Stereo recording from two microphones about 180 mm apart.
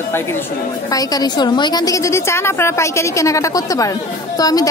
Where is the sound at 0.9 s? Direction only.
20° left (ahead or behind).